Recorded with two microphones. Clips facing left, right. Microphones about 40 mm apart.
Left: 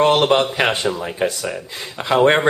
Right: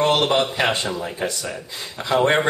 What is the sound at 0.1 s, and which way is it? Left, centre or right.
A man's voice, left.